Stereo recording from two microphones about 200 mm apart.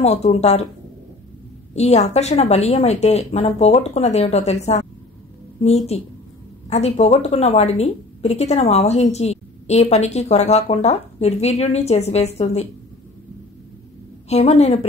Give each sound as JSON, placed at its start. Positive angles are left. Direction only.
{"t": 0.0, "sound": "a woman's voice", "side_deg": 30}
{"t": 1.8, "sound": "a woman's voice", "side_deg": 35}
{"t": 5.9, "sound": "a woman's voice", "side_deg": 30}
{"t": 14.3, "sound": "a woman's voice", "side_deg": 30}